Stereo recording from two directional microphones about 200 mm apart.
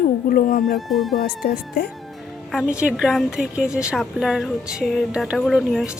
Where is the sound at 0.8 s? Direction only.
Centre (ahead or behind).